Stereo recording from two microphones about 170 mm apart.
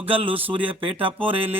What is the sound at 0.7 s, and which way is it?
Speech, 30° right (ahead or behind).